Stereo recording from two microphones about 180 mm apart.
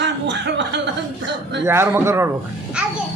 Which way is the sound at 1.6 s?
15° right (ahead or behind).